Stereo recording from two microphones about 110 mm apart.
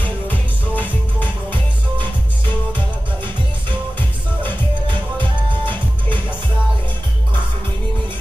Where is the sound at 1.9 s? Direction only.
45° right (ahead or behind).